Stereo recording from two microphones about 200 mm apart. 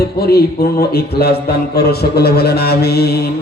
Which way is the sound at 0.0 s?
50° left (ahead or behind).